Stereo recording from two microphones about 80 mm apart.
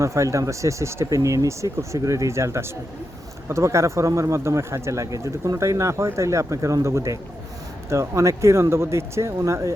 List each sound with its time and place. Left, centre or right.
0.0 s speech: right